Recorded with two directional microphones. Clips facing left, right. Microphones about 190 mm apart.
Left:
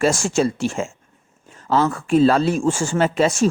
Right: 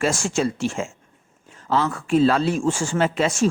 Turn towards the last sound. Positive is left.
turn(degrees=40)  # may be behind; listen again after turning